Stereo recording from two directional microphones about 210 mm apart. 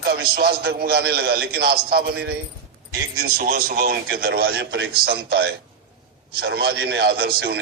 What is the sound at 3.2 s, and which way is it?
A man's voice, 45° right (ahead or behind).